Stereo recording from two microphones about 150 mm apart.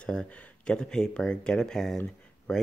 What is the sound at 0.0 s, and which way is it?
Speech, 5° left (ahead or behind).